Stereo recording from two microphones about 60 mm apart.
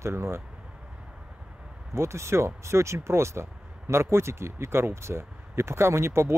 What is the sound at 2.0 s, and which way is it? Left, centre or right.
Speech, right.